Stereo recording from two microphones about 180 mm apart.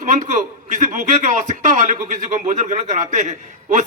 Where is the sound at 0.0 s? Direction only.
45° right (ahead or behind).